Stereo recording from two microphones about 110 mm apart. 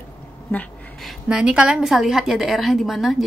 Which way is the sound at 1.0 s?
5° right (ahead or behind).